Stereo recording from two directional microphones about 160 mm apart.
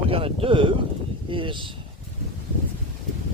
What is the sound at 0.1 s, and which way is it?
Speech, 35° right (ahead or behind).